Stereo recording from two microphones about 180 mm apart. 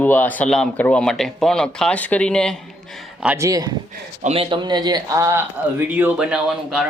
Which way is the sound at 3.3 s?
20° right (ahead or behind).